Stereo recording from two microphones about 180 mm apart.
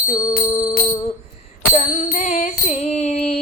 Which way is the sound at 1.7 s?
45° left (ahead or behind).